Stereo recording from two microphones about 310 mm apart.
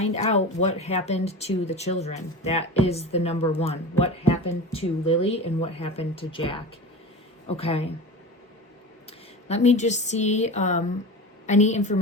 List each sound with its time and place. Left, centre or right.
0.0 s speech: left
9.5 s speech: left